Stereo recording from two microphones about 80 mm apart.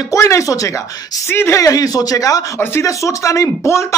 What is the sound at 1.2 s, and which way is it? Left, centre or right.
Speech, left.